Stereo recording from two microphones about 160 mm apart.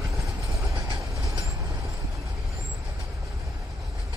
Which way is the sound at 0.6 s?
20° right (ahead or behind).